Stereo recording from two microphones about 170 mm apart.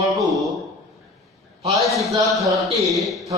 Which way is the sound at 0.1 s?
Centre (ahead or behind).